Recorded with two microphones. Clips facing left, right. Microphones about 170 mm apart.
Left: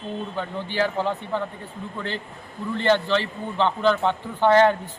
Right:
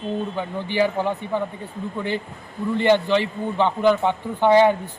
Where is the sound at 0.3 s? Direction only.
15° right (ahead or behind).